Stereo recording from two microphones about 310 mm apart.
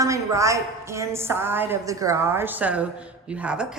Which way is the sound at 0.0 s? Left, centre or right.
Centre.